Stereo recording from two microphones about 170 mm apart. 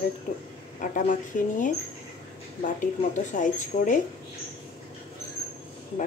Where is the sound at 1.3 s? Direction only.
50° left (ahead or behind).